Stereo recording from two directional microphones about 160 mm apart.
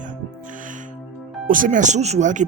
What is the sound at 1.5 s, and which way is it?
Speech, 55° right (ahead or behind).